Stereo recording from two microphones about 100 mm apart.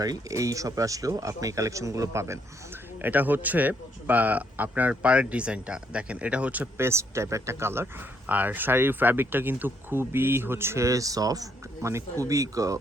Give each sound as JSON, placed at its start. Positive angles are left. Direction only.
{"t": 0.0, "sound": "speech", "side_deg": -35}
{"t": 3.0, "sound": "a man's voice", "side_deg": -20}